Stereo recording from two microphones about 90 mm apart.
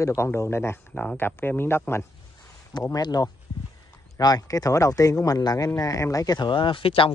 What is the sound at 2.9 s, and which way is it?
Speech, 45° left (ahead or behind).